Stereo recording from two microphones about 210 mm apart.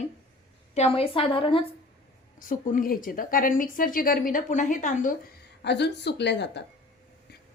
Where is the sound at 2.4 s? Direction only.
40° left (ahead or behind).